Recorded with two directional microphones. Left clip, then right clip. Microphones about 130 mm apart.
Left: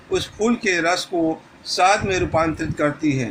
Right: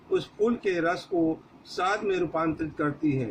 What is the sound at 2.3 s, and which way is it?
Speech, 35° left (ahead or behind).